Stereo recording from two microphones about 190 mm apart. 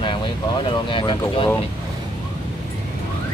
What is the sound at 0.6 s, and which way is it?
Speech, 25° left (ahead or behind).